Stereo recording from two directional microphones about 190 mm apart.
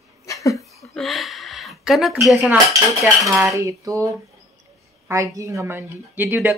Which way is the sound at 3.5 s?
15° right (ahead or behind).